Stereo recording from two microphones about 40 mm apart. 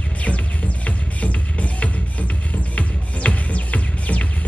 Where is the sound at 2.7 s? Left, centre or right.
Left.